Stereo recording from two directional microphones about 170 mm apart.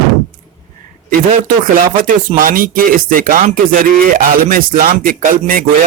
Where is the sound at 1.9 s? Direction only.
50° right (ahead or behind).